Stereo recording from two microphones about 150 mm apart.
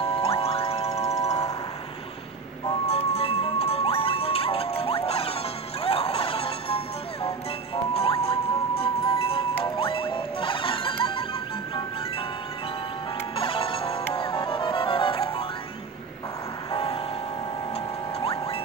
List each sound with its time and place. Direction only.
0.0 s music: 40° left (ahead or behind)
2.9 s music: 40° left (ahead or behind)
13.4 s music: 35° left (ahead or behind)
16.7 s music: 40° left (ahead or behind)